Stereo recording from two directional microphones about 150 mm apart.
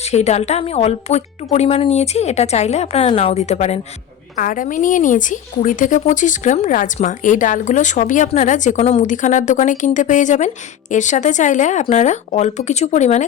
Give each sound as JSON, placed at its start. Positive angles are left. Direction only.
{"t": 0.0, "sound": "speech", "side_deg": 45}
{"t": 4.4, "sound": "a woman's voice", "side_deg": 60}